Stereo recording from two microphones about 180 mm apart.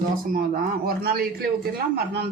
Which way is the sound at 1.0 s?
55° right (ahead or behind).